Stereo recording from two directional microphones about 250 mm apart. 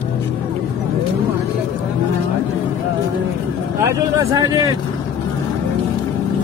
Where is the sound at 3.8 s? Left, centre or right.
Centre.